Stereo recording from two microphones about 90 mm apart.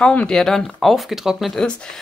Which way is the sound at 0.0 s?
10° left (ahead or behind).